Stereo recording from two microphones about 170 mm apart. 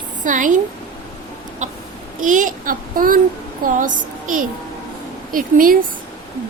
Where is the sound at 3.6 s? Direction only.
50° right (ahead or behind).